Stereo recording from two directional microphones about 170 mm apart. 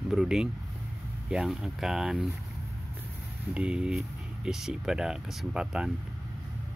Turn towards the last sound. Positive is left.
turn(degrees=-5)  # may be behind; listen again after turning